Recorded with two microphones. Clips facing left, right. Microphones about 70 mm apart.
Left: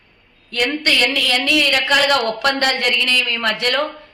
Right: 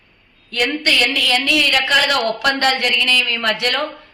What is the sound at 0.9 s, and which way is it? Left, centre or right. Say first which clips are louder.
A woman's voice: right 1 dB; left.